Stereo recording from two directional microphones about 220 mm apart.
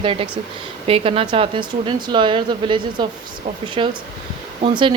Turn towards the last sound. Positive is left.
turn(degrees=-20)  # may be behind; listen again after turning